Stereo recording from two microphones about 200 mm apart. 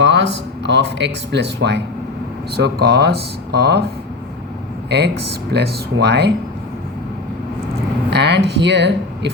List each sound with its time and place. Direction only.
0.0 s a sound: 60° right (ahead or behind)
0.6 s speech: 60° right (ahead or behind)
4.9 s speech: 55° right (ahead or behind)
8.1 s speech: 55° right (ahead or behind)